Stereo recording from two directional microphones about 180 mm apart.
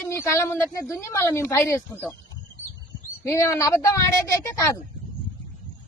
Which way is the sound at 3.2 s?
15° left (ahead or behind).